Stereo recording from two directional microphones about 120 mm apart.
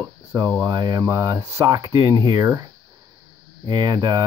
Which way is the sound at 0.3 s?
30° right (ahead or behind).